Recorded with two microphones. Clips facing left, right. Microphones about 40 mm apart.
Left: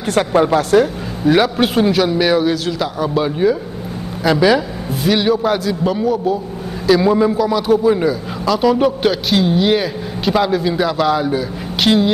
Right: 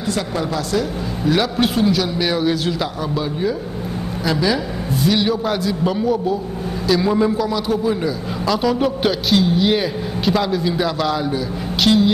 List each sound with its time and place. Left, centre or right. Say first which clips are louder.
0.0 s speech: left 8 dB; left
1.4 s a man's voice: left 3 dB; centre
3.2 s speech: left 7 dB; left
4.9 s a man's voice: left 3 dB; centre